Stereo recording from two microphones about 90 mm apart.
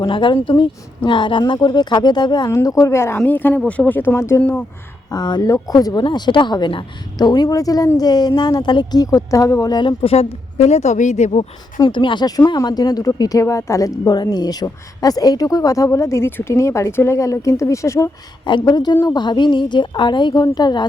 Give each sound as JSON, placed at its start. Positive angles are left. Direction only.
{"t": 0.0, "sound": "speech", "side_deg": 65}
{"t": 2.6, "sound": "a woman's voice", "side_deg": 35}
{"t": 5.1, "sound": "speech", "side_deg": 50}
{"t": 6.1, "sound": "speech", "side_deg": 60}
{"t": 7.2, "sound": "speech", "side_deg": 50}
{"t": 7.4, "sound": "a woman's voice", "side_deg": 40}
{"t": 9.8, "sound": "speech", "side_deg": 90}
{"t": 11.9, "sound": "speech", "side_deg": 65}
{"t": 12.5, "sound": "a woman's voice", "side_deg": 45}
{"t": 18.7, "sound": "speech", "side_deg": 50}